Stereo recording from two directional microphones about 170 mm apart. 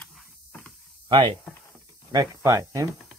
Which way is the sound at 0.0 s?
5° left (ahead or behind).